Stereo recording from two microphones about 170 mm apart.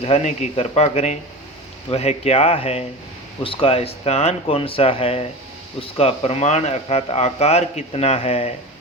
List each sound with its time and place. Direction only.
0.0 s a man's voice: 40° left (ahead or behind)